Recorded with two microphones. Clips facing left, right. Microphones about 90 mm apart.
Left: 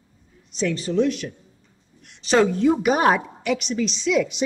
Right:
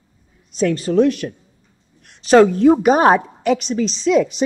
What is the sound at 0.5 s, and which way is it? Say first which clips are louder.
A woman's voice: right 6 dB; 50° right (ahead or behind).